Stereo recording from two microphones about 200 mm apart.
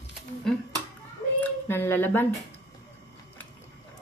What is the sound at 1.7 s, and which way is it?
Speech, 10° left (ahead or behind).